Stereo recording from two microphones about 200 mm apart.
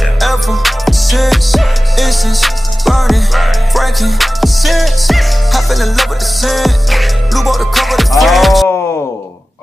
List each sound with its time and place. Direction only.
0.2 s music: centre (ahead or behind)